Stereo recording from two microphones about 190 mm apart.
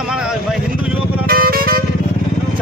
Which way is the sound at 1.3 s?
50° right (ahead or behind).